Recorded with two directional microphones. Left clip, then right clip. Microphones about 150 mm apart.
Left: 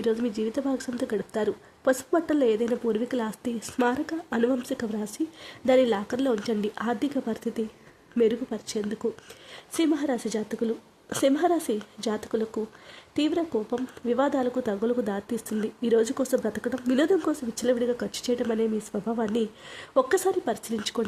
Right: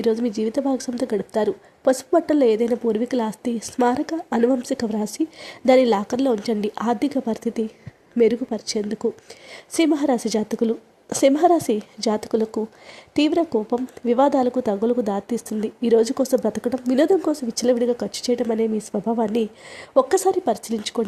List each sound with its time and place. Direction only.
0.0 s a woman's voice: 20° right (ahead or behind)
21.0 s speech: 5° right (ahead or behind)